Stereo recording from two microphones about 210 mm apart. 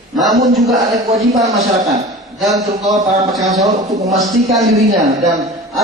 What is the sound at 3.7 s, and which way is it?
Speech, 15° right (ahead or behind).